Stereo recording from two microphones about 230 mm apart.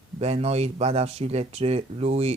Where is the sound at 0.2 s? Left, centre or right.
Right.